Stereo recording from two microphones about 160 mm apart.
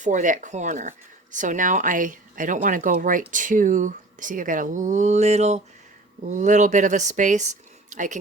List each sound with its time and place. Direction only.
0.0 s speech: 50° right (ahead or behind)